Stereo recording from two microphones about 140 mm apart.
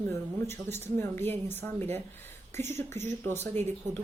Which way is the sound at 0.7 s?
15° left (ahead or behind).